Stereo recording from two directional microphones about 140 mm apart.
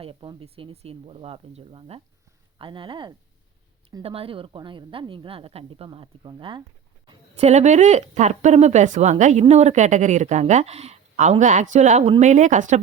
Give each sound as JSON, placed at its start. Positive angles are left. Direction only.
{"t": 0.0, "sound": "a woman's voice", "side_deg": -40}
{"t": 7.3, "sound": "speech", "side_deg": -50}